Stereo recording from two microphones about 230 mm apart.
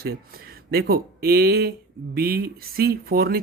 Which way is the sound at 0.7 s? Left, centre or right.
Right.